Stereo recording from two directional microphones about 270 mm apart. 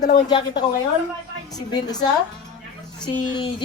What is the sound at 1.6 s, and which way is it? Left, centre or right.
Speech, centre.